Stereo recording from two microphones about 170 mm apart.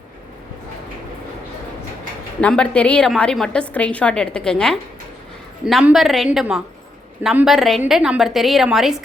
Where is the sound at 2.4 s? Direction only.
5° left (ahead or behind).